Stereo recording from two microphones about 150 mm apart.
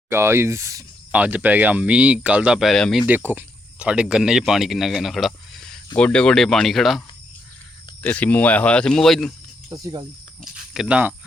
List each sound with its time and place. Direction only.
0.1 s speech: 15° right (ahead or behind)
1.1 s speech: 10° right (ahead or behind)
3.1 s speech: 10° right (ahead or behind)
8.0 s speech: 10° left (ahead or behind)
9.8 s speech: 25° right (ahead or behind)
10.4 s speech: 5° right (ahead or behind)